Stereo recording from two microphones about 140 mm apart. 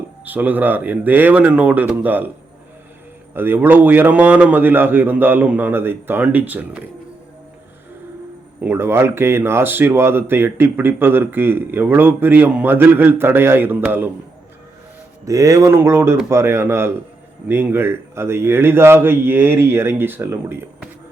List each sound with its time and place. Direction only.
0.3 s speech: 10° right (ahead or behind)
3.3 s speech: 15° right (ahead or behind)
8.6 s speech: 15° right (ahead or behind)
15.2 s speech: 25° right (ahead or behind)